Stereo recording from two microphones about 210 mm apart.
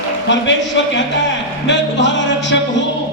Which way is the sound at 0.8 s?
60° left (ahead or behind).